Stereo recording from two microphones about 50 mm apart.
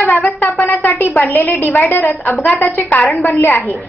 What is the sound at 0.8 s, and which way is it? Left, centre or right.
A woman's voice, left.